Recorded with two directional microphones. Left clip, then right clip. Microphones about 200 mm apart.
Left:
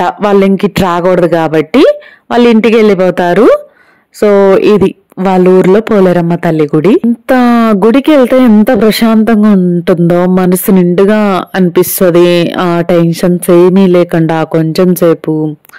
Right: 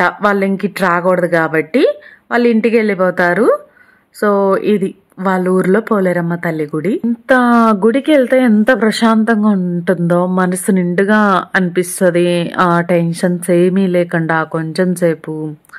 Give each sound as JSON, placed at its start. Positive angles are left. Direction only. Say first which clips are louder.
{"t": 0.3, "sound": "a woman's voice", "louder": "left 8 dB", "side_deg": 40}
{"t": 12.5, "sound": "speech", "louder": "left 2 dB", "side_deg": 25}
{"t": 12.8, "sound": "speech", "louder": "left 6 dB", "side_deg": 40}